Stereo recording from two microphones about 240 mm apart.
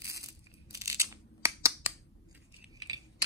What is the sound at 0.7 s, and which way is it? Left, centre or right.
Scissors, centre.